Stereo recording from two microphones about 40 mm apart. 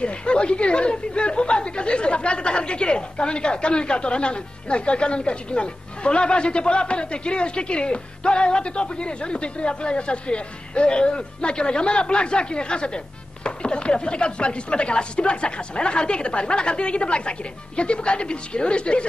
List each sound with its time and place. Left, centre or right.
0.0 s a woman's voice: left